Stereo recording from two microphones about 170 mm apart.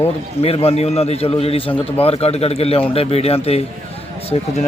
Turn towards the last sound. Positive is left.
turn(degrees=35)  # may be behind; listen again after turning